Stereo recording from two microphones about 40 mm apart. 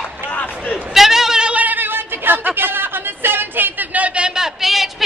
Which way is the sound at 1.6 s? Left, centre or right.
Right.